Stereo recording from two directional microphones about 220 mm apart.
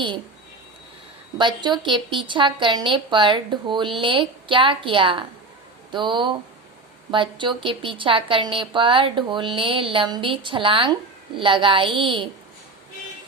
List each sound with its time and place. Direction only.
1.4 s a woman's voice: 20° right (ahead or behind)